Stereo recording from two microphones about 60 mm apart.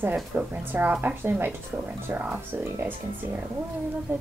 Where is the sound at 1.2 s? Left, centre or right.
Right.